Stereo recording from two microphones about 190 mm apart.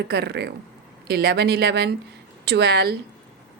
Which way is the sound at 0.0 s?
60° right (ahead or behind).